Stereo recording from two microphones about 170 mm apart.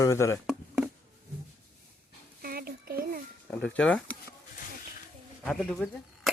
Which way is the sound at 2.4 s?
60° right (ahead or behind).